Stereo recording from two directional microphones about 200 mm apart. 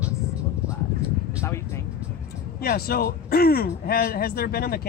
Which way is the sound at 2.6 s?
50° left (ahead or behind).